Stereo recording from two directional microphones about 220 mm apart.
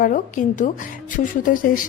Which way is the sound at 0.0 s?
35° left (ahead or behind).